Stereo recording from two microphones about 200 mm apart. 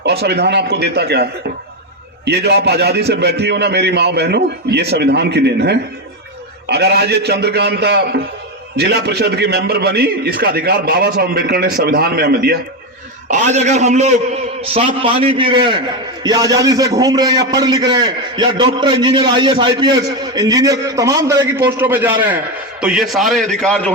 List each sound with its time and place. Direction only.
0.0 s a man's voice: 55° right (ahead or behind)
13.2 s a man's voice: 40° right (ahead or behind); by 23.9 s 5° left (ahead or behind)